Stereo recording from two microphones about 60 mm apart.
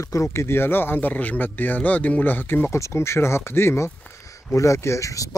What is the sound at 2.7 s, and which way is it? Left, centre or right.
Speech, left.